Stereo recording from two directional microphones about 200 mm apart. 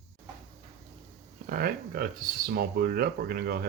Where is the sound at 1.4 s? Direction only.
50° right (ahead or behind).